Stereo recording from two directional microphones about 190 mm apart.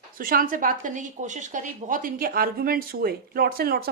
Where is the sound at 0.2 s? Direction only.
50° right (ahead or behind).